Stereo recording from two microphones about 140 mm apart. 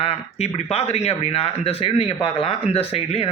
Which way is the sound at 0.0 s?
50° left (ahead or behind).